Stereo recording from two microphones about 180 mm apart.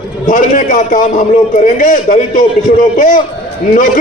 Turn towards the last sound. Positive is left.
turn(degrees=45)  # may be behind; listen again after turning